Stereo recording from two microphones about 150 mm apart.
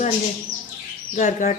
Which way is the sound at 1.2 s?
55° left (ahead or behind).